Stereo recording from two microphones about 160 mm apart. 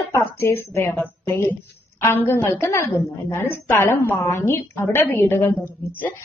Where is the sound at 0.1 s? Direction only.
15° left (ahead or behind).